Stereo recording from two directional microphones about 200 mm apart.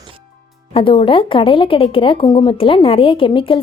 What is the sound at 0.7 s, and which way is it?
Speech, 25° left (ahead or behind).